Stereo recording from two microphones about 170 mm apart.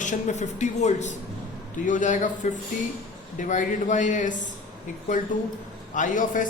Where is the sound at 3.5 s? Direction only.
45° left (ahead or behind).